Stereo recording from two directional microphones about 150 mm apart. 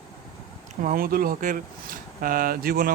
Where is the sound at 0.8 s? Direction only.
75° right (ahead or behind).